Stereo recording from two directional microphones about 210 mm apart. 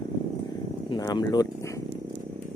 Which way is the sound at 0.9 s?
20° left (ahead or behind).